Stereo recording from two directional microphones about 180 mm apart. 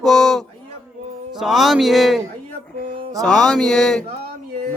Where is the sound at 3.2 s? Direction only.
5° left (ahead or behind).